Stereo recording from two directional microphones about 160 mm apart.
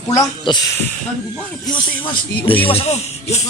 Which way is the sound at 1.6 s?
30° left (ahead or behind).